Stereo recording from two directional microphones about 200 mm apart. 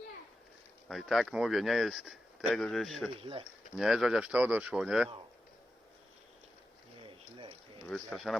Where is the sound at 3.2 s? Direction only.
25° right (ahead or behind).